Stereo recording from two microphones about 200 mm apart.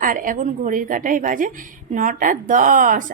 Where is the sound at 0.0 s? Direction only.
40° right (ahead or behind).